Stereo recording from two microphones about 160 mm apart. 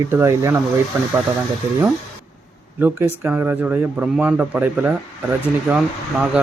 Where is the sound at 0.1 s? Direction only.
15° right (ahead or behind).